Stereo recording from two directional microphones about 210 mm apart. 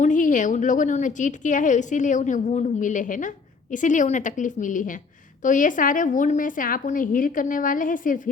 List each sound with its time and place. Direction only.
0.0 s a woman's voice: 40° left (ahead or behind)